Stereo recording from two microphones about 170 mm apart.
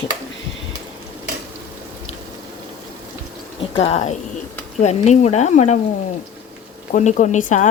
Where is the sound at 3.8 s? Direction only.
40° left (ahead or behind).